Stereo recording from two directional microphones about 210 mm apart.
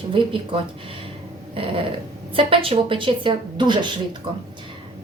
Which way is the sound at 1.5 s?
25° right (ahead or behind).